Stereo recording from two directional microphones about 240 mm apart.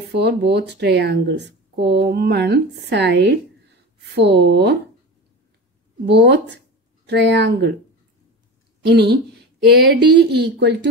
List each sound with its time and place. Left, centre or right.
0.1 s a woman's voice: right
6.0 s a woman's voice: right
8.8 s a woman's voice: right